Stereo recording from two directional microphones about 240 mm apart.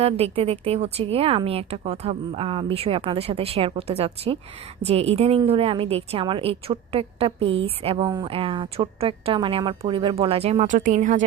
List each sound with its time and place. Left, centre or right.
0.0 s a woman's voice: right